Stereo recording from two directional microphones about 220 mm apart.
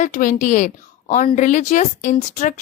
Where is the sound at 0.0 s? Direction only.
35° left (ahead or behind).